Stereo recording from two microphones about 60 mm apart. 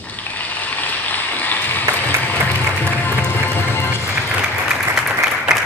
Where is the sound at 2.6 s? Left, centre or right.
Left.